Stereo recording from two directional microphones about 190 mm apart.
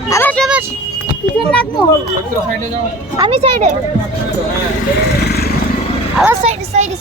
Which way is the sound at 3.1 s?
25° right (ahead or behind).